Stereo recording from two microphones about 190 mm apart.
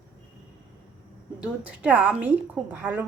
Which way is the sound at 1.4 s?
5° right (ahead or behind).